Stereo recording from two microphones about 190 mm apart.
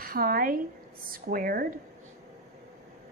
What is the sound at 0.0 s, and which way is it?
A woman's voice, 50° right (ahead or behind).